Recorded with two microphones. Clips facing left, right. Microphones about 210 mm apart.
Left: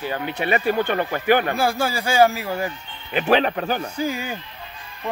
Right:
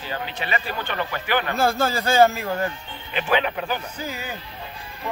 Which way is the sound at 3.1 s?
45° left (ahead or behind).